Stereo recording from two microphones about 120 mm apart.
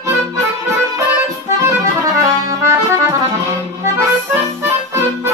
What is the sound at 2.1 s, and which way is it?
Music, 25° right (ahead or behind).